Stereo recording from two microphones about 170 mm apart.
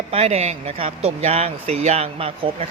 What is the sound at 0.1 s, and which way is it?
Speech, 40° right (ahead or behind).